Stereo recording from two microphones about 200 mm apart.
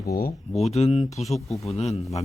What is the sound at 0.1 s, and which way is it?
Speech, 50° left (ahead or behind).